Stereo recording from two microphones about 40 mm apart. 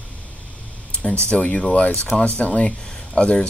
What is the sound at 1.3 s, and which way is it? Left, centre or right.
Speech, left.